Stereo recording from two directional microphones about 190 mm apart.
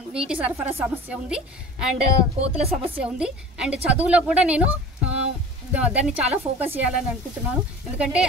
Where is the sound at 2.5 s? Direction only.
30° right (ahead or behind).